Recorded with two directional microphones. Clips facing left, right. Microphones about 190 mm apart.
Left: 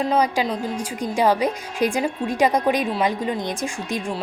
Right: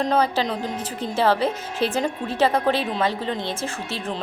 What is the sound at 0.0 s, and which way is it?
A woman's voice, 10° left (ahead or behind).